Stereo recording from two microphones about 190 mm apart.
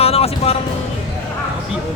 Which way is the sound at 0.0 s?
30° left (ahead or behind).